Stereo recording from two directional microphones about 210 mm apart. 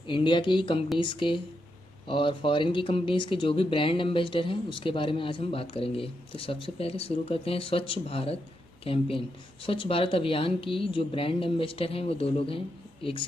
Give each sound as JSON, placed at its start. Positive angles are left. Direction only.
{"t": 0.0, "sound": "speech", "side_deg": 20}